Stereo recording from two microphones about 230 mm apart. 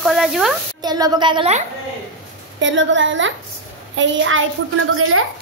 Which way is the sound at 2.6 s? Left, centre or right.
Right.